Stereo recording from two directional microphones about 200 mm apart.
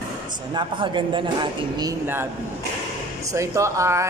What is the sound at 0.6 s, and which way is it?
Speech, 25° right (ahead or behind).